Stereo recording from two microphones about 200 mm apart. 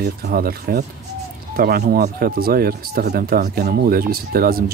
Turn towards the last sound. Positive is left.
turn(degrees=-50)  # may be behind; listen again after turning